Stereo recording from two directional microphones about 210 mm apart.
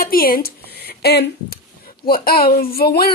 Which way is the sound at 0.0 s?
45° left (ahead or behind).